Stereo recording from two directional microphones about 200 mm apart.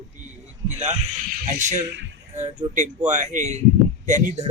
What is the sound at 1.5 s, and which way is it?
Speech, 35° right (ahead or behind).